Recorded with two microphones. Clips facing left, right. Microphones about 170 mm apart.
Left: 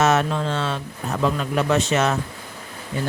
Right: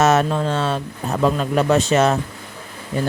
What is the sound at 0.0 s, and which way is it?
Speech, 40° right (ahead or behind).